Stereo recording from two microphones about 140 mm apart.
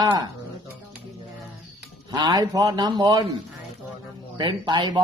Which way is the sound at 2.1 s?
30° right (ahead or behind).